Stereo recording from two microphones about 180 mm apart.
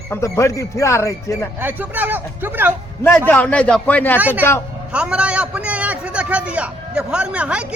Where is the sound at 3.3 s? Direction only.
10° left (ahead or behind).